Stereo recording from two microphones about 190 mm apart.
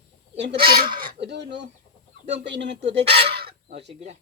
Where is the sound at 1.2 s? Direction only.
65° right (ahead or behind).